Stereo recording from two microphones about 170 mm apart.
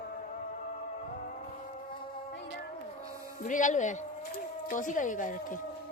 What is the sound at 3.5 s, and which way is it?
Speech, 50° left (ahead or behind).